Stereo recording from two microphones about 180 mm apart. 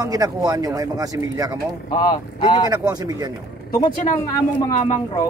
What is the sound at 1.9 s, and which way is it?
Speech, 20° left (ahead or behind).